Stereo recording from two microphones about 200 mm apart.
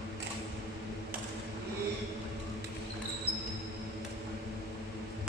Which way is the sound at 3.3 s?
30° left (ahead or behind).